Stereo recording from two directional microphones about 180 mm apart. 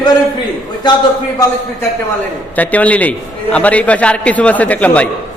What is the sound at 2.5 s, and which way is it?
A man's voice, 10° left (ahead or behind).